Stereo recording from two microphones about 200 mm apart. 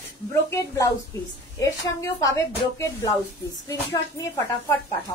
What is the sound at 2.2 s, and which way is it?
Speech, 15° left (ahead or behind).